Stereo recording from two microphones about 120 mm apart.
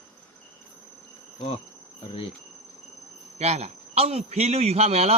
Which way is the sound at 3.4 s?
65° right (ahead or behind).